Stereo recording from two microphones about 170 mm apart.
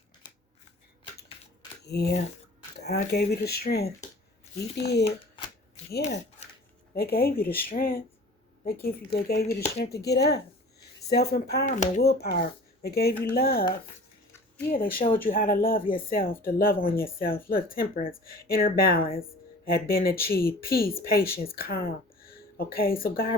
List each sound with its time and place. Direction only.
0.2 s scissors: 25° left (ahead or behind)
1.8 s speech: 75° left (ahead or behind)
2.7 s a sound: 75° left (ahead or behind)
3.1 s speech: 70° left (ahead or behind)
6.9 s speech: 65° left (ahead or behind)
11.6 s speech: 45° left (ahead or behind)
12.0 s speech: 65° left (ahead or behind)
14.7 s speech: 55° left (ahead or behind)